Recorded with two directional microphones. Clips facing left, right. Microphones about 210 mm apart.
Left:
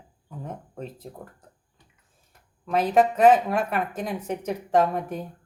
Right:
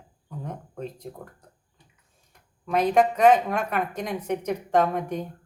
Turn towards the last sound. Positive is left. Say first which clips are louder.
# even
turn(degrees=5)  # may be behind; listen again after turning